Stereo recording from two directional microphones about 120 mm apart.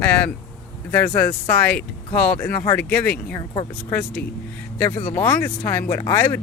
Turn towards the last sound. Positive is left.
turn(degrees=20)  # may be behind; listen again after turning